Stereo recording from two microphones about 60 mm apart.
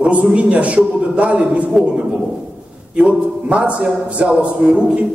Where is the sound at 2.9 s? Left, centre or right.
Centre.